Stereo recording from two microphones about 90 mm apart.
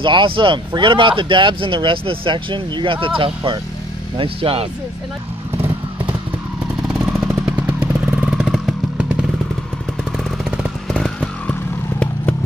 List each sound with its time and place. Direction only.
0.0 s speech: 65° right (ahead or behind)
4.2 s speech: 90° right
6.9 s vehicle: 10° right (ahead or behind)
10.9 s vehicle: 10° left (ahead or behind)